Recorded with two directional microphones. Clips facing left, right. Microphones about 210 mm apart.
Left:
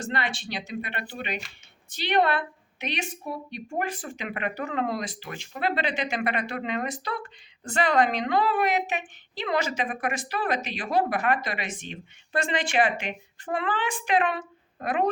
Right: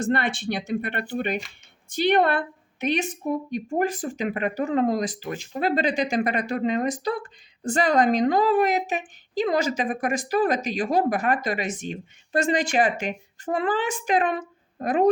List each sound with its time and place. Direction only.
0.0 s a woman's voice: 50° right (ahead or behind)